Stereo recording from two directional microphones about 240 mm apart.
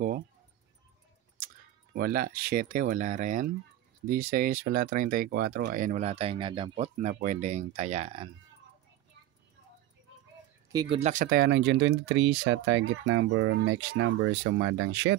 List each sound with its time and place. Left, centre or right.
2.0 s speech: right
10.7 s speech: centre
11.0 s speech: right